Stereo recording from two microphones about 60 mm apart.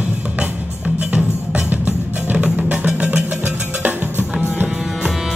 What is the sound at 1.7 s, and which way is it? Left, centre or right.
Music, right.